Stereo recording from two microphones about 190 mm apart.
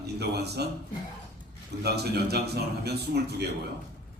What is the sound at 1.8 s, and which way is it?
A man's voice, 60° right (ahead or behind).